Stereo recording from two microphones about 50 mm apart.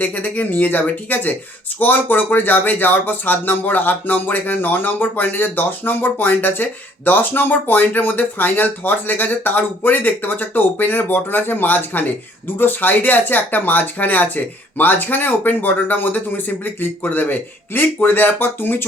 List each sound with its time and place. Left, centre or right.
0.0 s speech: left